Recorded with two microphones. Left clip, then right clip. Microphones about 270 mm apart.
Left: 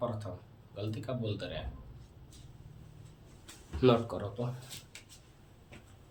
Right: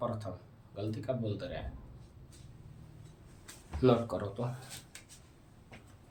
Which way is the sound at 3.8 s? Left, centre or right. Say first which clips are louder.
Left 1 dB; centre.